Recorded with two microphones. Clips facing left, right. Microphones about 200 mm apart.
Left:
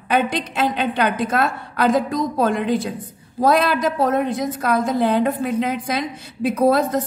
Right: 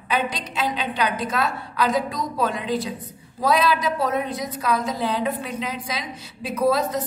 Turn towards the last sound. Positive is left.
turn(degrees=55)  # may be behind; listen again after turning